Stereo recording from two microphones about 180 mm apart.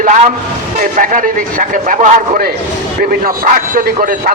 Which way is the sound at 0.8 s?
50° right (ahead or behind).